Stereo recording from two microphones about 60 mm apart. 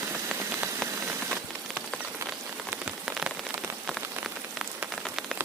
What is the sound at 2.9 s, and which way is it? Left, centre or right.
Rain on surface, centre.